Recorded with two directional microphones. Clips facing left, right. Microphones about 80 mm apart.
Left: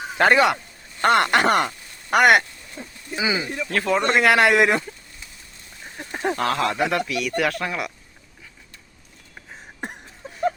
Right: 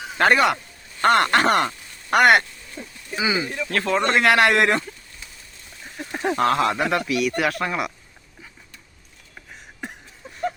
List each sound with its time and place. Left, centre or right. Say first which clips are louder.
0.2 s speech: left 1 dB; centre
1.5 s speech: even; centre
2.7 s speech: even; centre
3.7 s speech: left 1 dB; centre
5.8 s a sound: right 1 dB; centre
6.4 s speech: right 3 dB; centre